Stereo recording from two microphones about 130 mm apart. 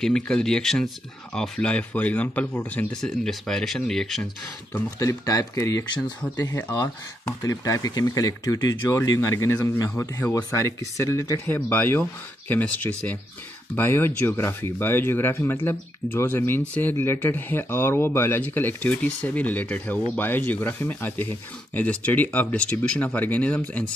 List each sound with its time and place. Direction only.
0.0 s speech: 5° left (ahead or behind)
4.9 s speech: 25° left (ahead or behind)
11.0 s speech: 25° left (ahead or behind)